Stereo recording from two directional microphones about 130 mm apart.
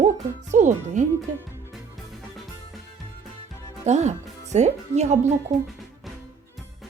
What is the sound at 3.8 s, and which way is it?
Speech, 60° right (ahead or behind).